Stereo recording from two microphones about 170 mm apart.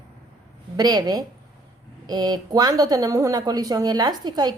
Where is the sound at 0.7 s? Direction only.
20° right (ahead or behind).